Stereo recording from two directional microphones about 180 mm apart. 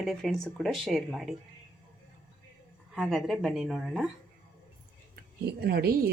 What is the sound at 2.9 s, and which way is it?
Speech, centre (ahead or behind).